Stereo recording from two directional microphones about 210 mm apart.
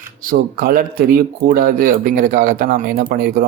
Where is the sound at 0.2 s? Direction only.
45° right (ahead or behind).